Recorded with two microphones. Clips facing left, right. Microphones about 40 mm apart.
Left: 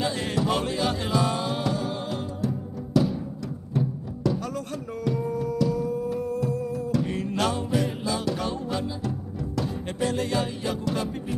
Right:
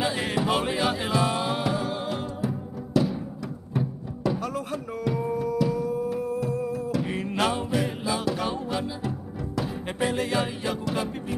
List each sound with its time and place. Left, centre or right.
0.0 s music: centre